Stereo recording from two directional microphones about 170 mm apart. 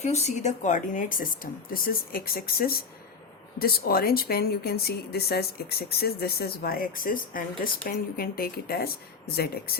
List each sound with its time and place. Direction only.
0.0 s speech: 40° left (ahead or behind); by 9.7 s 65° left (ahead or behind)